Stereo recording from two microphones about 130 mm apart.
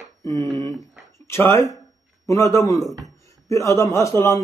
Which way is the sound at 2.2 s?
20° left (ahead or behind).